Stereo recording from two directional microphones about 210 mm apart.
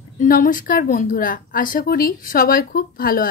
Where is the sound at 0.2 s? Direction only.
40° left (ahead or behind).